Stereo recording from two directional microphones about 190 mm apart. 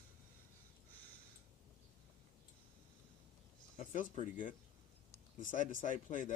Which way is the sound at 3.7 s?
45° left (ahead or behind).